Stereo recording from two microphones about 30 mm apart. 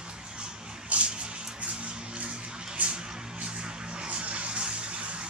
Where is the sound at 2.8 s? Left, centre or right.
Right.